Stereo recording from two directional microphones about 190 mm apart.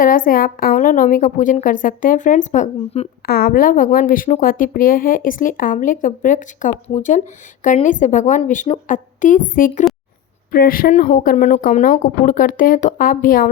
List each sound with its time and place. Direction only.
0.0 s a woman's voice: 45° left (ahead or behind)
3.2 s a woman's voice: 50° left (ahead or behind)